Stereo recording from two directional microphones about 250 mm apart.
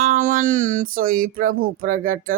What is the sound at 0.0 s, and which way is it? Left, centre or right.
Speech, right.